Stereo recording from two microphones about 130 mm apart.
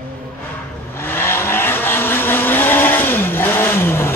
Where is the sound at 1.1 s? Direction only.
20° left (ahead or behind).